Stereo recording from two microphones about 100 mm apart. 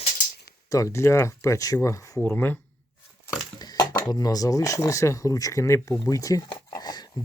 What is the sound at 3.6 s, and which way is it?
Speech, 40° left (ahead or behind).